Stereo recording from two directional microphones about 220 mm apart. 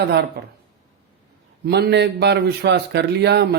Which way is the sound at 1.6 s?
45° right (ahead or behind).